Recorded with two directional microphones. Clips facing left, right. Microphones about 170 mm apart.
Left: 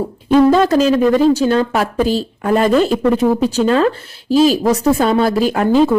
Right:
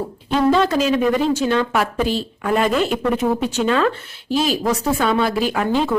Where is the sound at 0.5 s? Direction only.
40° left (ahead or behind).